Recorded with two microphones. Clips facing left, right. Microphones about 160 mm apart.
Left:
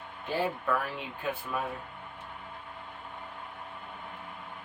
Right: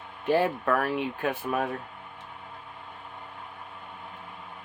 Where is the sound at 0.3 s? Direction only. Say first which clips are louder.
Right 6 dB; 70° right (ahead or behind).